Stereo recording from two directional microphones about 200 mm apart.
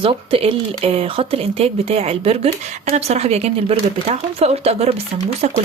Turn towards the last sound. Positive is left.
turn(degrees=-35)  # may be behind; listen again after turning